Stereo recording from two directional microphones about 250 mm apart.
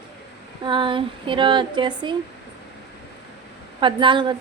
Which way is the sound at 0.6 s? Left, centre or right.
Centre.